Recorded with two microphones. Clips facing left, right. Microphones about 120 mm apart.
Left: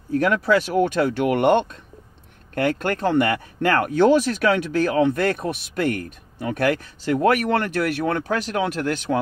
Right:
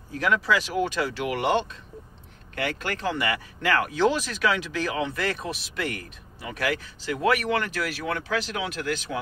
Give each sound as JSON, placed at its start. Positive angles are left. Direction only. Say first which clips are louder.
{"t": 0.1, "sound": "speech", "louder": "left 5 dB", "side_deg": 50}